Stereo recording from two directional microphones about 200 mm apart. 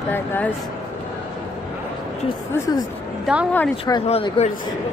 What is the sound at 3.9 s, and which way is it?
Speech, 25° left (ahead or behind).